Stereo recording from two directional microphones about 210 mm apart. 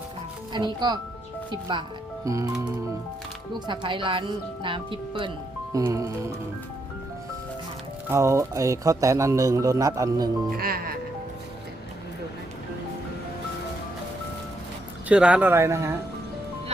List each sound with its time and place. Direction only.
0.5 s speech: 20° right (ahead or behind)
3.7 s speech: 25° right (ahead or behind)
8.1 s speech: 15° right (ahead or behind)
10.5 s speech: 45° right (ahead or behind)
15.1 s speech: 5° right (ahead or behind)